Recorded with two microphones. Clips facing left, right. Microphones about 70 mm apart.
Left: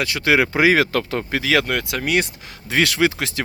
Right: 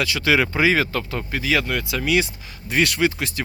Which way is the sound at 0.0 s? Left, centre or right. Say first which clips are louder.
Left 1 dB; left.